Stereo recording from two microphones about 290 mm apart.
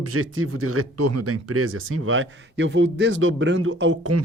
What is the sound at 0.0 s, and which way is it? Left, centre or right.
Speech, right.